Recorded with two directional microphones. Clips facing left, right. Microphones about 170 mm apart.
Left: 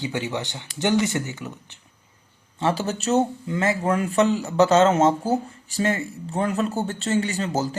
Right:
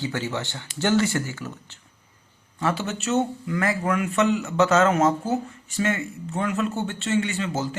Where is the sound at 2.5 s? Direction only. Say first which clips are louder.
Left 2 dB; 30° left (ahead or behind).